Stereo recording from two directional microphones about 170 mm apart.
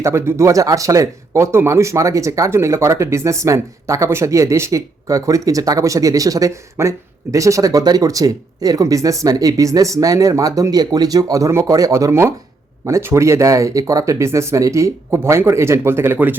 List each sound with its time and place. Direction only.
0.0 s speech: 15° right (ahead or behind)